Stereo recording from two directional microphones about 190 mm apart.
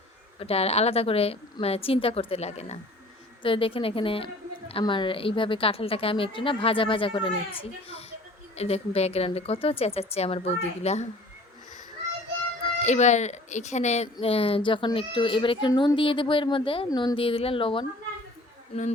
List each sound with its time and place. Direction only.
0.3 s speech: 30° left (ahead or behind)
12.8 s speech: 40° left (ahead or behind)